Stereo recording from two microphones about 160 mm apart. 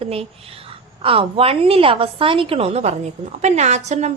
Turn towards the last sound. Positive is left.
turn(degrees=-45)  # may be behind; listen again after turning